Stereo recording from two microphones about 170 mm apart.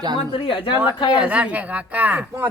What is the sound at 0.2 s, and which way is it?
Speech, 30° left (ahead or behind).